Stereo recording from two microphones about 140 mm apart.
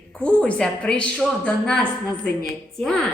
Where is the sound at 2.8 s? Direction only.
5° left (ahead or behind).